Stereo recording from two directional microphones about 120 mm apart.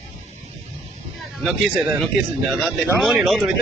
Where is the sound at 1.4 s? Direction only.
Centre (ahead or behind).